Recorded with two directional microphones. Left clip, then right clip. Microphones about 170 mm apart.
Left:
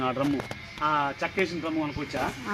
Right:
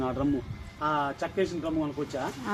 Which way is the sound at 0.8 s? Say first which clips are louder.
Left 2 dB; 35° left (ahead or behind).